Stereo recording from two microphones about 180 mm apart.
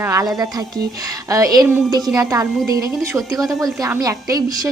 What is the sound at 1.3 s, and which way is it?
A woman's voice, 20° right (ahead or behind).